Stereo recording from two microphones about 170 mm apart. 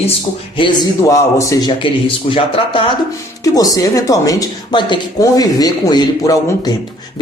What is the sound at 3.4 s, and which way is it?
Speech, 20° left (ahead or behind).